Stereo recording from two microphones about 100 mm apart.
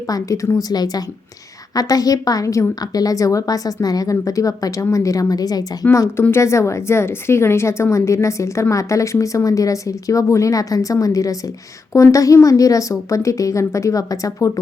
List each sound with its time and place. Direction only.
0.1 s a woman's voice: 35° left (ahead or behind)
5.8 s a woman's voice: 25° left (ahead or behind)